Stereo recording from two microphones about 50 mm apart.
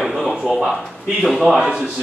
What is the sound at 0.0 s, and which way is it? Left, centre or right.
Speech, centre.